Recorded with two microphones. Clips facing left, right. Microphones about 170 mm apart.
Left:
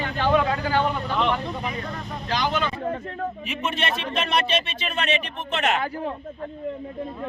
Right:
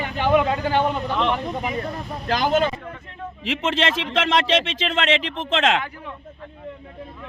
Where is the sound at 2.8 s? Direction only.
40° left (ahead or behind).